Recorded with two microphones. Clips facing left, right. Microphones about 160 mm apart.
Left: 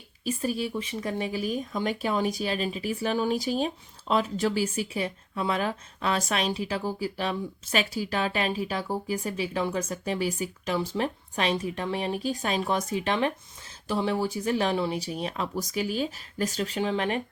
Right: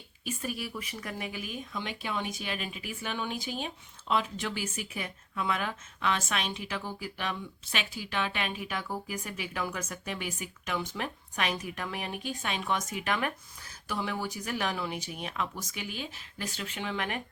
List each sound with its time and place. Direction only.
0.3 s speech: 30° left (ahead or behind)